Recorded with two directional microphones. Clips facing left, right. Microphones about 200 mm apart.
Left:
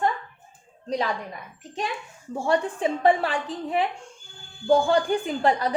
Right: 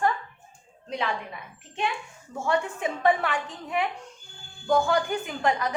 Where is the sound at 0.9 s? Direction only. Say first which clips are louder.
Left 3 dB; 40° left (ahead or behind).